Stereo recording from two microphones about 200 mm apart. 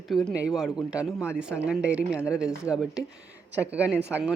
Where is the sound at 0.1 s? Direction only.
Centre (ahead or behind).